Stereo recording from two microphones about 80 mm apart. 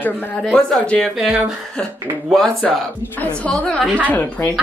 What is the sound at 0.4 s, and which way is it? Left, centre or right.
Speech, centre.